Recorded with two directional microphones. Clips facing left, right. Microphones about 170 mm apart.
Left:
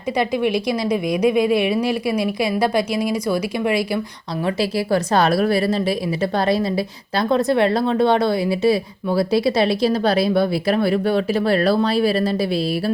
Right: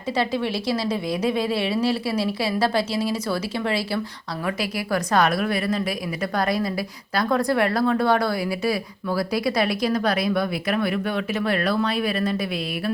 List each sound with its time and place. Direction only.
0.2 s a woman's voice: 15° left (ahead or behind)
4.4 s a woman's voice: 30° left (ahead or behind)